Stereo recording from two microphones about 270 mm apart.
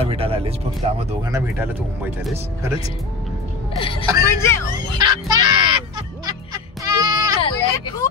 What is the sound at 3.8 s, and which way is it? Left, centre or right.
Vehicle, centre.